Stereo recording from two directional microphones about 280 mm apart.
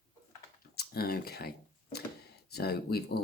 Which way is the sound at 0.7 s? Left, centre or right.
Left.